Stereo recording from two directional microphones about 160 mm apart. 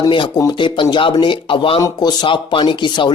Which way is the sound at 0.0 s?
25° left (ahead or behind).